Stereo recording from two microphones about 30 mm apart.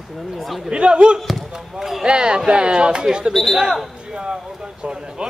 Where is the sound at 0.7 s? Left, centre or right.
Right.